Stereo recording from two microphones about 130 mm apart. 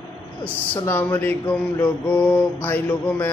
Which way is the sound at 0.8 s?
15° left (ahead or behind).